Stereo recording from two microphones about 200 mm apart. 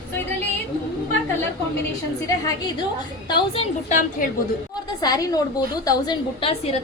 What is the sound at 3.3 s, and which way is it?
Speech, 25° left (ahead or behind).